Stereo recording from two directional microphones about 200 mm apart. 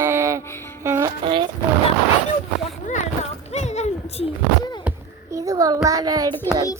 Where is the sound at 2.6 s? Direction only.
35° left (ahead or behind).